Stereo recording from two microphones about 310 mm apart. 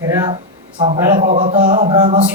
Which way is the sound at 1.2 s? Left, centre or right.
Right.